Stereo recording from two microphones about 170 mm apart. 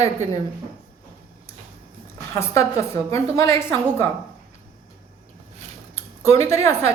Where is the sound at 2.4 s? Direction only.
15° left (ahead or behind).